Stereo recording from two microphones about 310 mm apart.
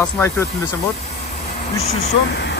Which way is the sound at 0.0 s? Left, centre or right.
Centre.